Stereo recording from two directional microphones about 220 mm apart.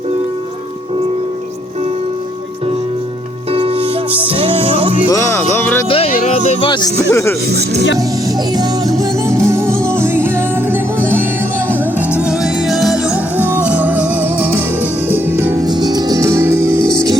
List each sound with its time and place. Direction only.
3.5 s music: 25° right (ahead or behind)
5.1 s speech: 15° left (ahead or behind)
6.1 s speech: 30° left (ahead or behind); by 7.3 s 15° left (ahead or behind)
7.5 s speech: 50° right (ahead or behind)
8.5 s music: 15° right (ahead or behind)